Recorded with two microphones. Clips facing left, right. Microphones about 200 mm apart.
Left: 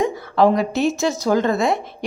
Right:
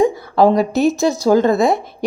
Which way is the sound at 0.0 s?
35° right (ahead or behind).